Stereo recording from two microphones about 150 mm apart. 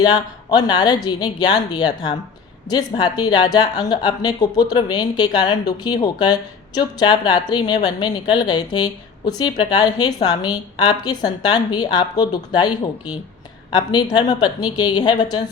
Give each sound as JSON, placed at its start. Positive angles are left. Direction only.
{"t": 0.0, "sound": "speech", "side_deg": 30}
{"t": 13.7, "sound": "speech", "side_deg": 30}